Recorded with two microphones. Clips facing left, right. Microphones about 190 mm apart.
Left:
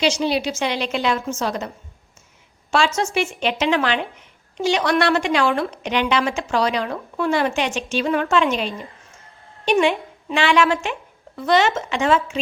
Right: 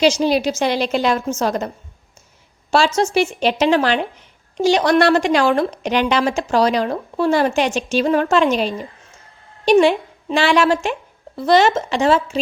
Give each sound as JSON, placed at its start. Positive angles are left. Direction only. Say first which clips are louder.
{"t": 0.0, "sound": "a woman's voice", "louder": "right 5 dB", "side_deg": -45}